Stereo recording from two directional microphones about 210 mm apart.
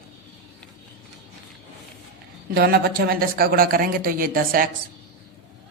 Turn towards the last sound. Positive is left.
turn(degrees=-45)  # may be behind; listen again after turning